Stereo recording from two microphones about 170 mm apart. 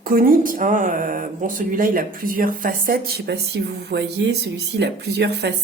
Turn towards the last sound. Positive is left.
turn(degrees=-80)